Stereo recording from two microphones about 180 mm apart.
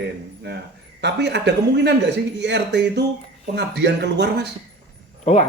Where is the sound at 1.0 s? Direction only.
70° right (ahead or behind).